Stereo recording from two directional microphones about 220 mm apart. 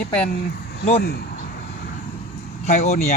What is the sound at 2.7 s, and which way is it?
Speech, 30° left (ahead or behind).